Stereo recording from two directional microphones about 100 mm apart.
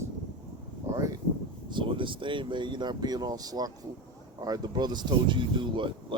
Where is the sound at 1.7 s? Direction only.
55° right (ahead or behind).